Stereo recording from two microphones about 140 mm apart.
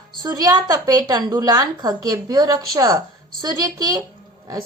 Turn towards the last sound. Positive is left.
turn(degrees=-30)  # may be behind; listen again after turning